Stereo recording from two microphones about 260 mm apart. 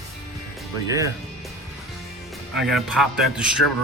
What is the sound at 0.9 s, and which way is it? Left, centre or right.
Speech, centre.